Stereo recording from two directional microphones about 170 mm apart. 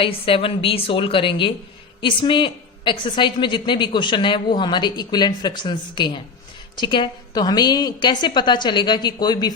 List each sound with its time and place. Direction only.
0.0 s a woman's voice: 30° left (ahead or behind)